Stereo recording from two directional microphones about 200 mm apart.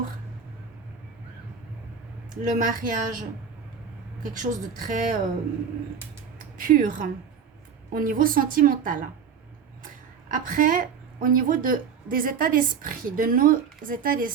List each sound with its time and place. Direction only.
2.4 s a woman's voice: 40° right (ahead or behind)
6.6 s a woman's voice: 45° right (ahead or behind)